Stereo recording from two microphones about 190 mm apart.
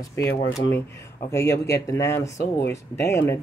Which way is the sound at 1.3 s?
15° left (ahead or behind).